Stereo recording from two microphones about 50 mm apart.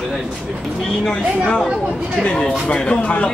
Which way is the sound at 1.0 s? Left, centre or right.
Centre.